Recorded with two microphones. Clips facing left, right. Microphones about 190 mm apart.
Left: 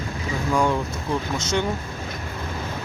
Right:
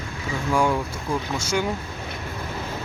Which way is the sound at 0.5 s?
10° right (ahead or behind).